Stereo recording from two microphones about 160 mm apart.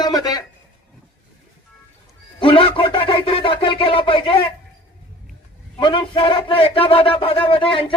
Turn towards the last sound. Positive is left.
turn(degrees=35)  # may be behind; listen again after turning